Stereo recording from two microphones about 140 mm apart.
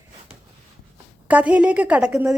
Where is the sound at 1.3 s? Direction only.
10° right (ahead or behind).